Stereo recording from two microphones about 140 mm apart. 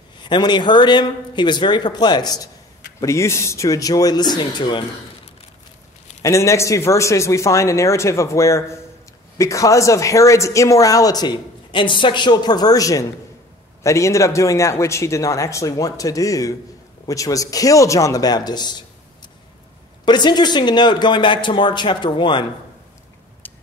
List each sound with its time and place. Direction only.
0.2 s speech: 30° left (ahead or behind)
6.2 s speech: 20° left (ahead or behind)
20.1 s speech: 30° left (ahead or behind)
23.4 s a sound: 15° left (ahead or behind)